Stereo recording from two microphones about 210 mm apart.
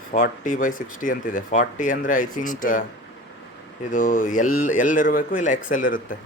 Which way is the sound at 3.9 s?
40° left (ahead or behind).